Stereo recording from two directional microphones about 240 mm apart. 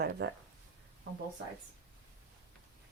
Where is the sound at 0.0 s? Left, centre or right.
Right.